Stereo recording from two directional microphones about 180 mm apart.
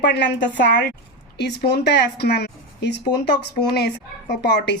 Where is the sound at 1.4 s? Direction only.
65° left (ahead or behind).